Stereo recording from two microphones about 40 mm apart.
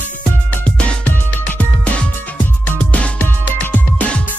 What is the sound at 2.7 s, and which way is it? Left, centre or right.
Music, left.